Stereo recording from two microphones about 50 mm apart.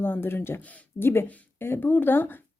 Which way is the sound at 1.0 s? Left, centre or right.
Left.